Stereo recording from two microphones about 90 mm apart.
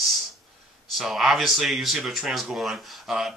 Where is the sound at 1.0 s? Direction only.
5° right (ahead or behind).